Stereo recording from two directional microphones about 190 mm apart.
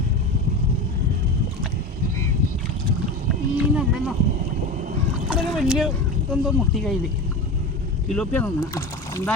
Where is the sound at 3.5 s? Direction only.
5° right (ahead or behind).